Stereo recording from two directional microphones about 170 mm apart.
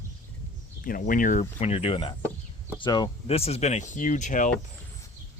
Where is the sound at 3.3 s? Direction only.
35° left (ahead or behind).